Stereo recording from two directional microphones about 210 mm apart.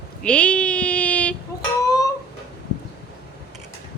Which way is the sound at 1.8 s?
15° left (ahead or behind).